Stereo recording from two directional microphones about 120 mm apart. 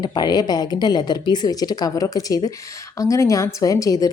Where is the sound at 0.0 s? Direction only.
35° left (ahead or behind).